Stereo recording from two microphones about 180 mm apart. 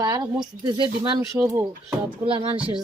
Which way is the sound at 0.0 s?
20° right (ahead or behind).